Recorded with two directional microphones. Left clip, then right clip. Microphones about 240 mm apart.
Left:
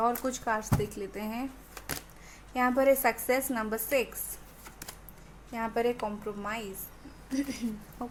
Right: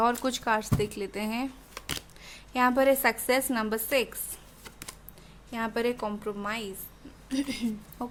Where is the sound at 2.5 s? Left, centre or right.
Right.